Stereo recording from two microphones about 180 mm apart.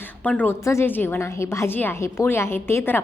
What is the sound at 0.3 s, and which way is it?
A woman's voice, 10° left (ahead or behind).